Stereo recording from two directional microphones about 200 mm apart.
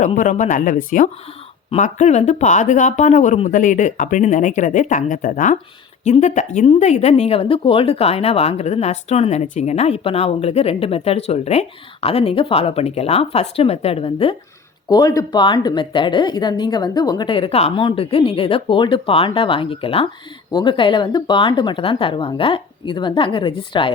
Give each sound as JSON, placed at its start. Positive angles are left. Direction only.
{"t": 0.0, "sound": "a woman's voice", "side_deg": 40}